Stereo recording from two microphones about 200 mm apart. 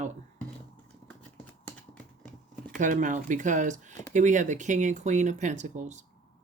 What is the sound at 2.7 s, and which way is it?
Speech, 40° right (ahead or behind).